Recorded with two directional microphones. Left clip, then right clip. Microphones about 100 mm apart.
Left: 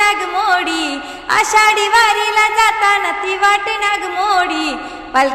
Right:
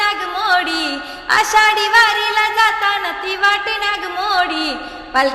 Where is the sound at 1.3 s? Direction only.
40° left (ahead or behind).